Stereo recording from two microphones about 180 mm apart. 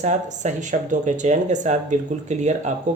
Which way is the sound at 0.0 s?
40° right (ahead or behind).